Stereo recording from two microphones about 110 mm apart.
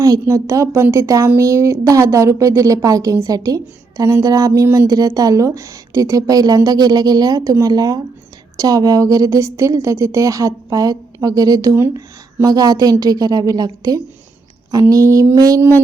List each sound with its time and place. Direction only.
0.0 s a woman's voice: 30° right (ahead or behind)